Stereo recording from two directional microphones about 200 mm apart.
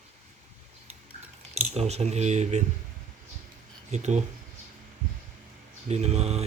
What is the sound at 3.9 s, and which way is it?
Speech, 35° right (ahead or behind).